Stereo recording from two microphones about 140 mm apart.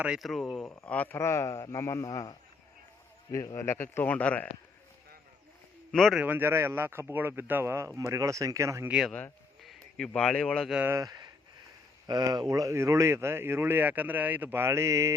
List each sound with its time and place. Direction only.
0.0 s speech: 5° right (ahead or behind); by 2.3 s 25° left (ahead or behind)
3.3 s a man's voice: 20° left (ahead or behind)
5.9 s speech: centre (ahead or behind)
6.2 s speech: 15° right (ahead or behind)
8.9 s speech: 5° right (ahead or behind)
10.7 s speech: 10° right (ahead or behind)
10.9 s speech: 30° right (ahead or behind)